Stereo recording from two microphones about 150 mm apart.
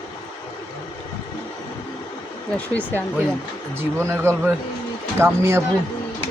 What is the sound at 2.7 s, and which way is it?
Speech, 10° left (ahead or behind).